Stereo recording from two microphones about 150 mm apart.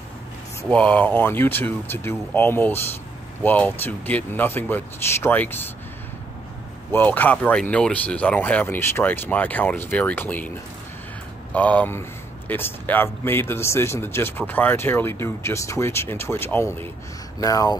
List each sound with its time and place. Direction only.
0.7 s a man's voice: 10° left (ahead or behind)
6.9 s a man's voice: 10° left (ahead or behind)
11.5 s a man's voice: 10° left (ahead or behind)